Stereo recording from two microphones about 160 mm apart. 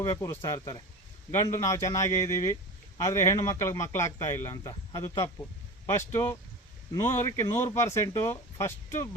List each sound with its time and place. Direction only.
0.0 s speech: 20° left (ahead or behind)
4.7 s speech: 30° left (ahead or behind)
5.0 s speech: 20° left (ahead or behind)